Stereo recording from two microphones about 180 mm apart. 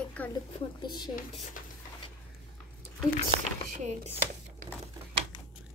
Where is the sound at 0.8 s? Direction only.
25° left (ahead or behind).